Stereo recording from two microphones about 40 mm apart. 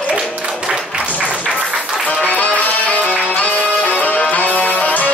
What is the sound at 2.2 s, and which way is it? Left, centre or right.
Music, left.